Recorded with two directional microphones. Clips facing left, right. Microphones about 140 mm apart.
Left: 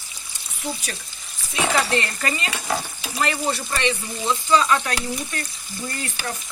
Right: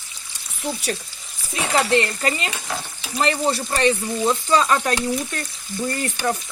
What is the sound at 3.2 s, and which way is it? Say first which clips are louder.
Speech: right 3 dB; 30° right (ahead or behind).